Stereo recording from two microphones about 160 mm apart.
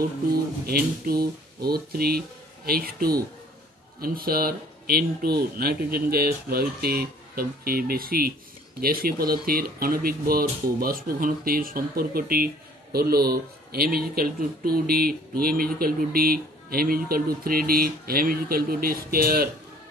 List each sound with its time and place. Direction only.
0.7 s a man's voice: 70° right (ahead or behind)